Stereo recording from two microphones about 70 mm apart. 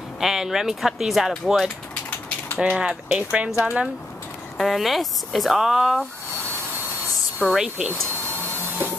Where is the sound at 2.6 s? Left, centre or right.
Centre.